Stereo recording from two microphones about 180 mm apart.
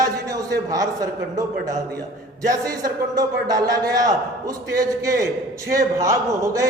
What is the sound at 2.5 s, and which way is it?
A man's voice, 20° right (ahead or behind).